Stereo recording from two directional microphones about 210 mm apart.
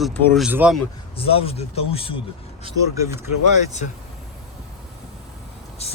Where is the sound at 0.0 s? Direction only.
Centre (ahead or behind).